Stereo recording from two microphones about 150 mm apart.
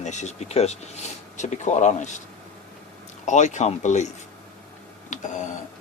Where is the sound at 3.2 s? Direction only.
55° left (ahead or behind).